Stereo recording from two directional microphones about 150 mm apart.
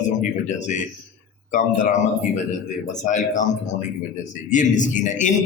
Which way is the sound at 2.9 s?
55° left (ahead or behind).